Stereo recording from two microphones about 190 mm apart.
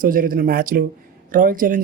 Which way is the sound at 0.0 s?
45° right (ahead or behind).